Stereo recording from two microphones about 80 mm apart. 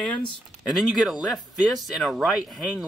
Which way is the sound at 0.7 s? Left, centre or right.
Centre.